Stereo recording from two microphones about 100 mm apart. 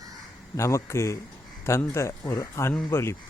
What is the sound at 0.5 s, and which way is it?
Speech, 30° left (ahead or behind).